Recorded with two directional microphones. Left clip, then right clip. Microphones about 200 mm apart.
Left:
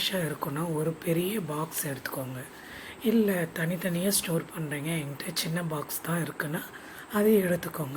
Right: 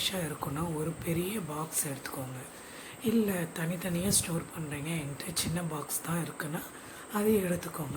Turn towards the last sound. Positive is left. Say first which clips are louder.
# left 5 dB
turn(degrees=15)  # may be behind; listen again after turning